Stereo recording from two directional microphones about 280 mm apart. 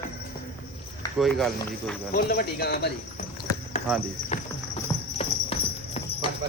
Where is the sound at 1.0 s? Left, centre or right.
Centre.